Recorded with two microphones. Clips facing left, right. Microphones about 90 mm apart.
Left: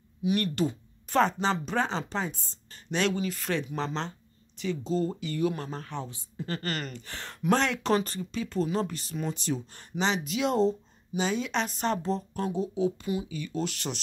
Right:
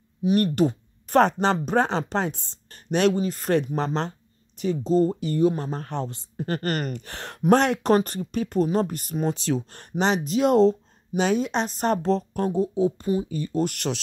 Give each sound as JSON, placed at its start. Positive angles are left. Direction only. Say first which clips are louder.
{"t": 0.2, "sound": "speech", "louder": "right 7 dB", "side_deg": -40}
{"t": 0.7, "sound": "speech", "louder": "right 6 dB", "side_deg": -55}
{"t": 3.2, "sound": "speech", "louder": "right 7 dB", "side_deg": -40}
{"t": 5.9, "sound": "speech", "louder": "right 7 dB", "side_deg": -60}
{"t": 9.3, "sound": "speech", "louder": "right 6 dB", "side_deg": -90}
{"t": 10.2, "sound": "speech", "louder": "right 7 dB", "side_deg": -40}
{"t": 10.5, "sound": "speech", "louder": "right 8 dB", "side_deg": -80}
{"t": 11.4, "sound": "speech", "louder": "right 4 dB", "side_deg": -40}
{"t": 11.9, "sound": "speech", "louder": "right 7 dB", "side_deg": -70}
{"t": 12.4, "sound": "speech", "louder": "right 6 dB", "side_deg": -45}